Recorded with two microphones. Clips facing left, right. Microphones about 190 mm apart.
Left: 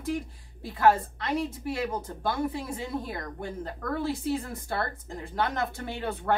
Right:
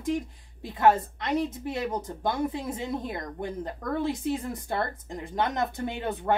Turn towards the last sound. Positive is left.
turn(degrees=-20)  # may be behind; listen again after turning